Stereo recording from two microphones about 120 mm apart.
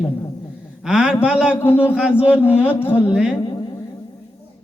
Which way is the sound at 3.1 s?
5° right (ahead or behind).